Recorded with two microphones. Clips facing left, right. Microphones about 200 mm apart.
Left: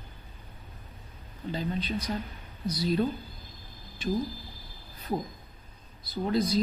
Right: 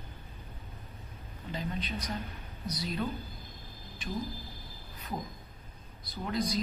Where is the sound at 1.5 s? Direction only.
30° left (ahead or behind).